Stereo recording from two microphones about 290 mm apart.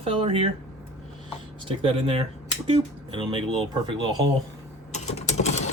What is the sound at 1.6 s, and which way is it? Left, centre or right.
Speech, centre.